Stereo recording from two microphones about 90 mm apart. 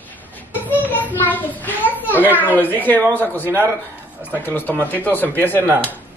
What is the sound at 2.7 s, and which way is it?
Speech, 20° left (ahead or behind).